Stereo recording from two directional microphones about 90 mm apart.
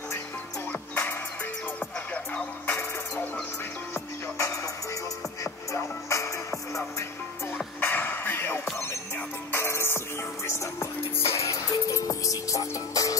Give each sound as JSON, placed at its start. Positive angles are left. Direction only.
{"t": 2.7, "sound": "music", "side_deg": 25}
{"t": 7.8, "sound": "music", "side_deg": 20}